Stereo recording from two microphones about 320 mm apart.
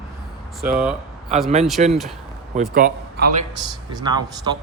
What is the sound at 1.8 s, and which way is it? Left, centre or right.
A man's voice, right.